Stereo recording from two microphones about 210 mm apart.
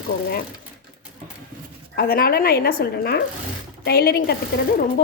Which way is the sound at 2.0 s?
45° left (ahead or behind).